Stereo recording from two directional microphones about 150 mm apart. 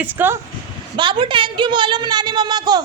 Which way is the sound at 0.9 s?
35° right (ahead or behind).